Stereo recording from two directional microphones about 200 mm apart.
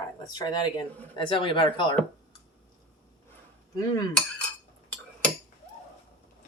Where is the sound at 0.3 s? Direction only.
20° left (ahead or behind).